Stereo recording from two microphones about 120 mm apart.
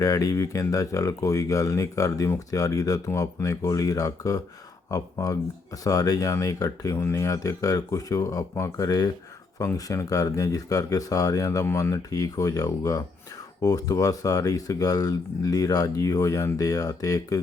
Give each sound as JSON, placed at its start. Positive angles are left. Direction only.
{"t": 0.0, "sound": "speech", "side_deg": 30}